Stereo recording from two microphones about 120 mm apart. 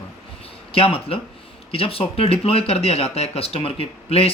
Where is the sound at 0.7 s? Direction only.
55° left (ahead or behind).